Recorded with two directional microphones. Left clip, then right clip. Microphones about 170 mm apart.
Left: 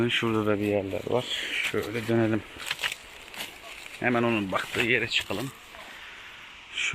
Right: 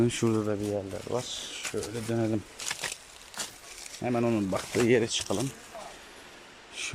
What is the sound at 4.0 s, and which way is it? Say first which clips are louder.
Speech: left 3 dB; 10° right (ahead or behind).